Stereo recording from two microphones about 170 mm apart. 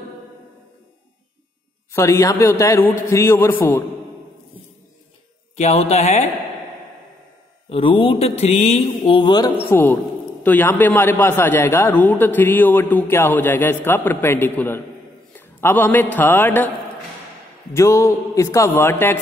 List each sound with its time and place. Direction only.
1.9 s a man's voice: 15° left (ahead or behind)
5.6 s speech: 40° left (ahead or behind)
7.7 s speech: 30° left (ahead or behind)
10.4 s a man's voice: 10° left (ahead or behind)
17.7 s a man's voice: 15° left (ahead or behind)